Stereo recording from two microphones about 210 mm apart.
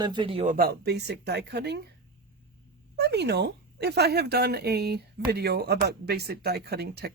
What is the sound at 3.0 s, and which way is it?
Speech, 50° right (ahead or behind).